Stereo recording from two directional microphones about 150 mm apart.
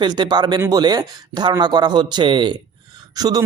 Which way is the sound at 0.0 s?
30° right (ahead or behind).